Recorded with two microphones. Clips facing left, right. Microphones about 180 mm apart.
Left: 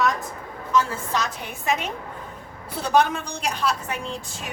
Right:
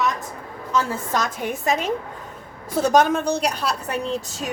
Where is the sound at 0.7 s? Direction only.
45° right (ahead or behind).